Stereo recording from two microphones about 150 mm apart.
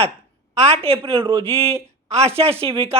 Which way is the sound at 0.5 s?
45° right (ahead or behind).